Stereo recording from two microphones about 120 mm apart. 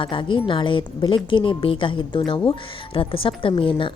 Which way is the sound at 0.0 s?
45° left (ahead or behind).